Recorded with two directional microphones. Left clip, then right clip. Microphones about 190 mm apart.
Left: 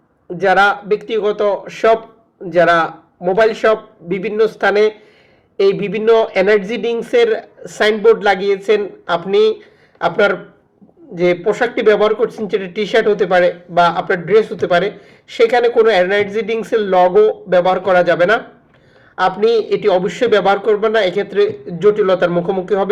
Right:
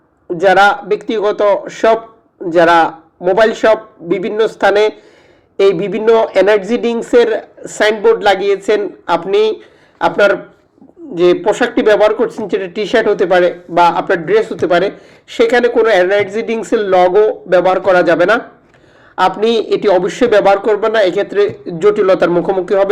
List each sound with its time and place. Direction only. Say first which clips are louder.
0.3 s a man's voice: right 3 dB; 35° right (ahead or behind)
11.5 s a man's voice: right 2 dB; 35° right (ahead or behind)